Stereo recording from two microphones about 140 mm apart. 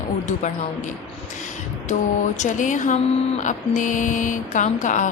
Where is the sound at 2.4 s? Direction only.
65° left (ahead or behind).